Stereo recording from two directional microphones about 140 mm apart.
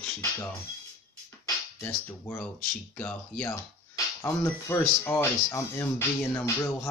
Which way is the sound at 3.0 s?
10° left (ahead or behind).